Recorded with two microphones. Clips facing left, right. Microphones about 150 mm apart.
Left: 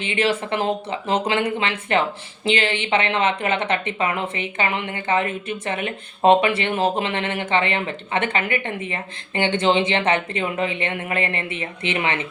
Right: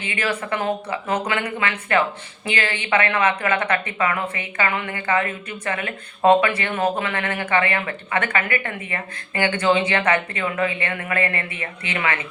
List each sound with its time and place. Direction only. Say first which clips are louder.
0.0 s speech: left 4 dB; 25° left (ahead or behind)